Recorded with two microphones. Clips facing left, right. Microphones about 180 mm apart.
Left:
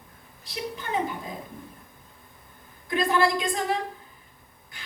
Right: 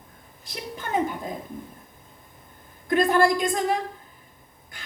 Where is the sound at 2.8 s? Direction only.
45° right (ahead or behind).